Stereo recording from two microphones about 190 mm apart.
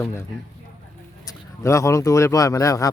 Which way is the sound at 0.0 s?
15° left (ahead or behind).